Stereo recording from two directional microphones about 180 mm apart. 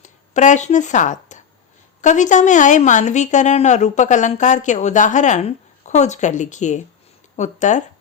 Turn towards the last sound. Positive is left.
turn(degrees=40)  # may be behind; listen again after turning